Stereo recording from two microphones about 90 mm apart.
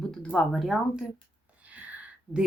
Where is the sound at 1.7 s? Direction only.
15° right (ahead or behind).